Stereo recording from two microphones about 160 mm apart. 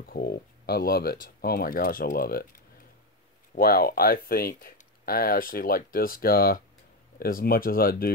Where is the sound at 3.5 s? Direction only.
70° left (ahead or behind).